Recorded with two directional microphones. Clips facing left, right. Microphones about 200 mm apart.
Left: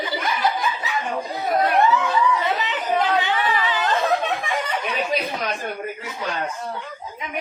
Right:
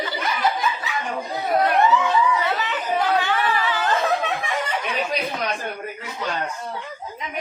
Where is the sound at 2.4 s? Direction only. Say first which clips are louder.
Left 1 dB; 20° left (ahead or behind).